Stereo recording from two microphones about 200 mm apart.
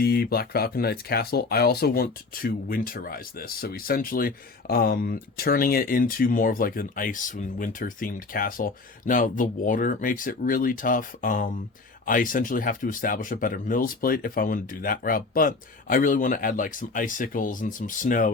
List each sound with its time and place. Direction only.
0.0 s speech: 50° left (ahead or behind)